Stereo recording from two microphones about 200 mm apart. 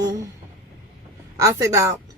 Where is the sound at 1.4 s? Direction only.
15° right (ahead or behind).